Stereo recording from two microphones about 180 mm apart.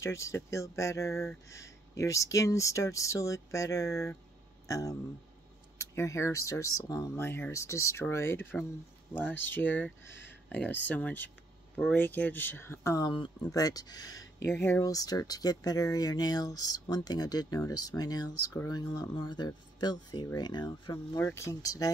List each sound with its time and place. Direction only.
0.0 s speech: 15° left (ahead or behind)